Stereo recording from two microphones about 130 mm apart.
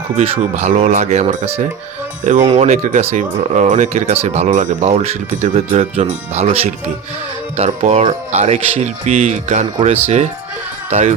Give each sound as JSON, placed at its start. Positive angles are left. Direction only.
{"t": 0.5, "sound": "speech", "side_deg": -60}